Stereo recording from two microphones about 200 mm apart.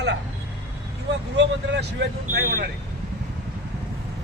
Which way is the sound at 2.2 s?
50° right (ahead or behind).